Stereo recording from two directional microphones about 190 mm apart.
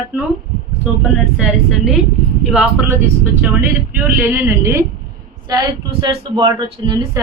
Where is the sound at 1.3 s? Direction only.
Centre (ahead or behind).